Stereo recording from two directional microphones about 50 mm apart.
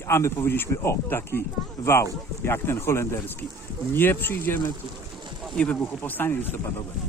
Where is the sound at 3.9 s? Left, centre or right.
Left.